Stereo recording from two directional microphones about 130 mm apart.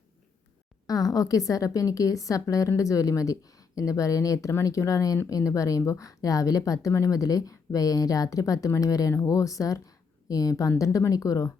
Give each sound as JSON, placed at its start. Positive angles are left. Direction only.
{"t": 0.9, "sound": "a woman's voice", "side_deg": 30}